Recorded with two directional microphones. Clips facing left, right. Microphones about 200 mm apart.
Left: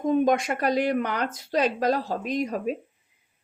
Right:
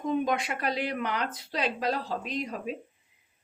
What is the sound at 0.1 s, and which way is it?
Speech, 45° left (ahead or behind).